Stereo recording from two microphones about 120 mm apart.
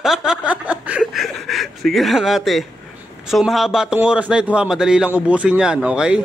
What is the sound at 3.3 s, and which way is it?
A man's voice, centre (ahead or behind).